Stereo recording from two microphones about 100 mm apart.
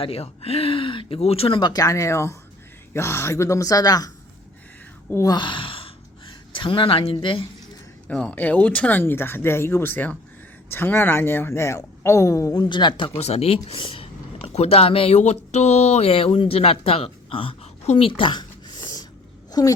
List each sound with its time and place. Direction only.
0.0 s speech: 80° left; by 1.7 s 65° left (ahead or behind)
1.7 s speech: 35° left (ahead or behind)
5.1 s speech: 35° left (ahead or behind)
5.4 s sigh: 60° left (ahead or behind)
6.5 s a woman's voice: 60° left (ahead or behind)
8.0 s speech: 10° left (ahead or behind); by 12.6 s 35° left (ahead or behind)
12.6 s speech: 50° left (ahead or behind)
13.1 s speech: 90° left
13.7 s speech: 60° left (ahead or behind); by 18.1 s 80° left
18.2 s a sound: 50° left (ahead or behind)
19.5 s speech: 40° left (ahead or behind)